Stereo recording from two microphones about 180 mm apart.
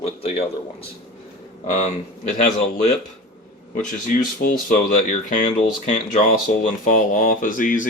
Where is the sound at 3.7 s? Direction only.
50° left (ahead or behind).